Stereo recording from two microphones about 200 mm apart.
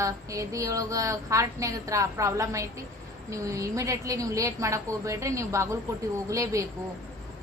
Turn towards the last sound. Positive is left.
turn(degrees=-15)  # may be behind; listen again after turning